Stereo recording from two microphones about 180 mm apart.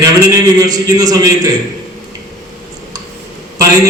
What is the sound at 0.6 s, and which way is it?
Speech, 20° right (ahead or behind).